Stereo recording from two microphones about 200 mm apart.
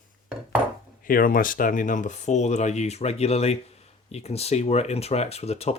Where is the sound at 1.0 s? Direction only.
45° left (ahead or behind).